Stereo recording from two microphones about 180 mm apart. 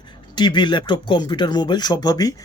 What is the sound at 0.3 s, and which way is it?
Speech, 25° left (ahead or behind).